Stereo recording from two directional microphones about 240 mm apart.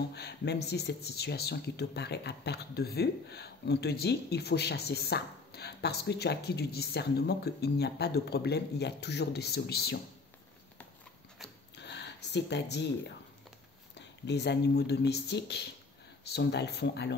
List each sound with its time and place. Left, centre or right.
0.1 s speech: left
11.7 s a sound: left
13.9 s speech: left